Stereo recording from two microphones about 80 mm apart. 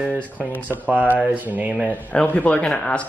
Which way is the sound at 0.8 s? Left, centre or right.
Centre.